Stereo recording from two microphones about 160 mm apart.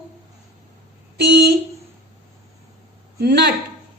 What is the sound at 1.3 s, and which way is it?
Speech, 90° right.